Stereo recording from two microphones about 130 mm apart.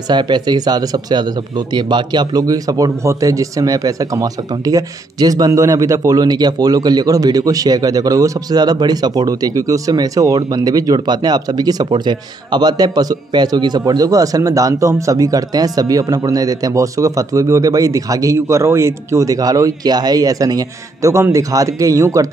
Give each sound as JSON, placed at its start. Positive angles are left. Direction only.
{"t": 0.1, "sound": "speech", "side_deg": -35}